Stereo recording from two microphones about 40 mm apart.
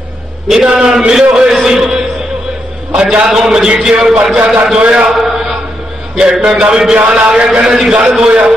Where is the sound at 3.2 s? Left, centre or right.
Centre.